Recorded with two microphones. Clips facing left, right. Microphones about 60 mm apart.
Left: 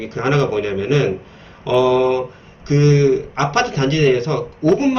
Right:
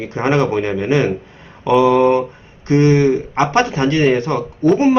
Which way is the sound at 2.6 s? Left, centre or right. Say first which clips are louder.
Right 1 dB; right.